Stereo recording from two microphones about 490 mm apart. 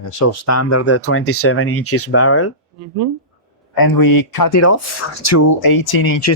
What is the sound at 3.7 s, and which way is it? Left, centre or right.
Speech, left.